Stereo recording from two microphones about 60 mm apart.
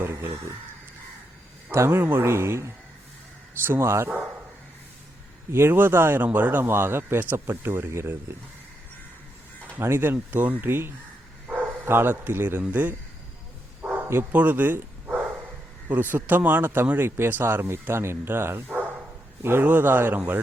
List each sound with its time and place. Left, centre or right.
0.0 s speech: right
1.7 s speech: right
5.5 s speech: right
9.7 s speech: right
14.3 s speech: right
15.9 s a man's voice: right